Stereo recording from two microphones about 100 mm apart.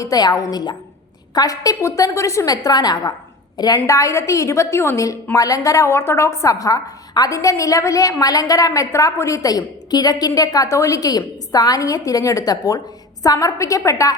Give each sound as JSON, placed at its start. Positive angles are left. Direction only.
{"t": 0.0, "sound": "a woman's voice", "side_deg": 40}
{"t": 3.8, "sound": "a woman's voice", "side_deg": 30}